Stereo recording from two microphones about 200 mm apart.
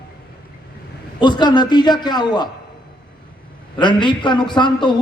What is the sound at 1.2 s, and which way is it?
A man's voice, 20° left (ahead or behind).